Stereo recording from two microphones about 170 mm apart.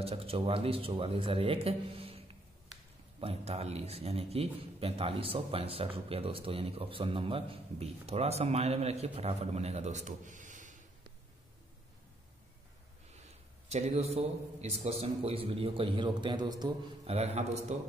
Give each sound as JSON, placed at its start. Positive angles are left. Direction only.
{"t": 0.0, "sound": "a man's voice", "side_deg": -35}
{"t": 13.7, "sound": "a man's voice", "side_deg": -40}